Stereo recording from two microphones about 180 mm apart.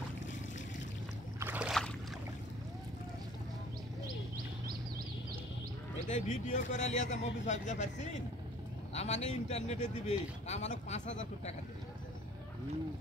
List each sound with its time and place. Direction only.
1.4 s boat: 10° right (ahead or behind)
6.0 s speech: 45° left (ahead or behind)